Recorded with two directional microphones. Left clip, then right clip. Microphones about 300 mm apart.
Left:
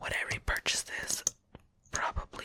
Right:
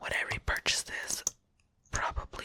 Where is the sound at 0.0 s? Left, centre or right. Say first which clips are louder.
Right 1 dB; centre.